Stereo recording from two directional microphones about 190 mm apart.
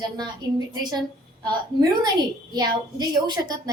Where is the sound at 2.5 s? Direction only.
20° right (ahead or behind).